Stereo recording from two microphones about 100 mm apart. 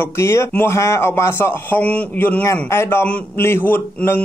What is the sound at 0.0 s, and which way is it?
Speech, 25° left (ahead or behind).